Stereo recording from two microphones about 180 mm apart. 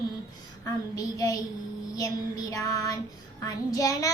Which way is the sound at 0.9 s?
20° left (ahead or behind).